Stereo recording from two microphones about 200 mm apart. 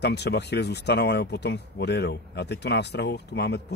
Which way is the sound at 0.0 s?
55° left (ahead or behind).